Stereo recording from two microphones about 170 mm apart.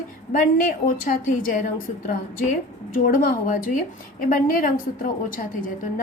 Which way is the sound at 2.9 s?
50° left (ahead or behind).